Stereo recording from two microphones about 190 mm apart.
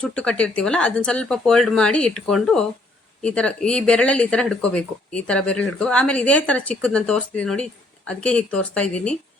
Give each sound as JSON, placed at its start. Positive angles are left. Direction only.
{"t": 0.0, "sound": "speech", "side_deg": 5}